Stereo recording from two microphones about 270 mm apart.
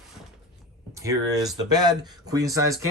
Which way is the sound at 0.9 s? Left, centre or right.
Centre.